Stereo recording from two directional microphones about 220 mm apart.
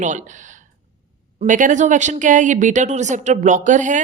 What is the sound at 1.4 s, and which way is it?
Speech, 35° right (ahead or behind).